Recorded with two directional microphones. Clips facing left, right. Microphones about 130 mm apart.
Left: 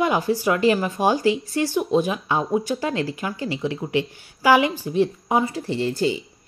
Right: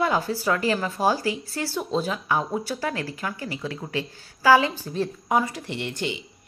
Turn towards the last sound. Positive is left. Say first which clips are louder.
# left 7 dB
turn(degrees=35)  # may be behind; listen again after turning